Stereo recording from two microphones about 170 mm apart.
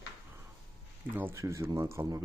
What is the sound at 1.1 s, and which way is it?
Speech, 15° right (ahead or behind).